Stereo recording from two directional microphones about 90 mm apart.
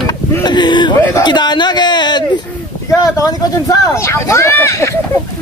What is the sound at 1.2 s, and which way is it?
Speech, 55° left (ahead or behind).